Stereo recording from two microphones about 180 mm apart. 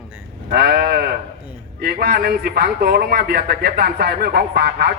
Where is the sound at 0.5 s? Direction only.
65° right (ahead or behind).